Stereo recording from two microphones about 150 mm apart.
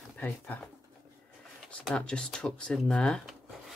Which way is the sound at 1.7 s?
5° left (ahead or behind).